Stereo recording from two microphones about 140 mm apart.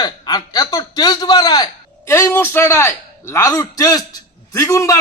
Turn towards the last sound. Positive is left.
turn(degrees=20)  # may be behind; listen again after turning